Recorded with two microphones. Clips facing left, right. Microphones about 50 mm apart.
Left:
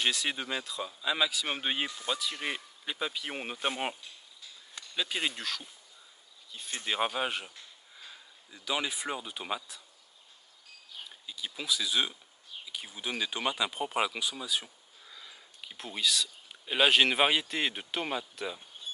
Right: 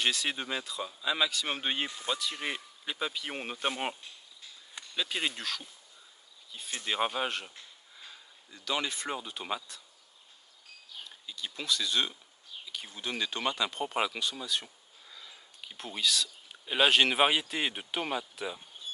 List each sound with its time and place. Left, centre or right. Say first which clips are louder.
0.0 s speech: even; centre
4.9 s speech: even; centre
11.1 s speech: even; centre